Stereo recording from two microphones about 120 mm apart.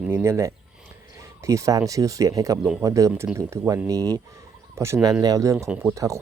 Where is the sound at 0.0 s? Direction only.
15° right (ahead or behind).